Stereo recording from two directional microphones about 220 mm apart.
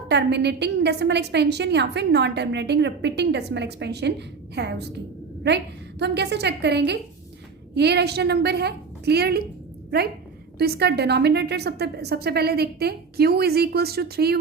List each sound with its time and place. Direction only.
0.1 s a woman's voice: 50° right (ahead or behind)
10.6 s a woman's voice: 45° right (ahead or behind)